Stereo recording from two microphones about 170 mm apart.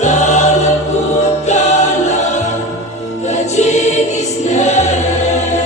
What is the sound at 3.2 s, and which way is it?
Choir, 40° left (ahead or behind).